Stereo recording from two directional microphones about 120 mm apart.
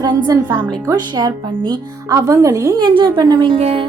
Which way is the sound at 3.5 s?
55° right (ahead or behind).